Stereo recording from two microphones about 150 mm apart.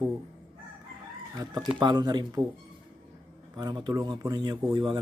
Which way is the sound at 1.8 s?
30° right (ahead or behind).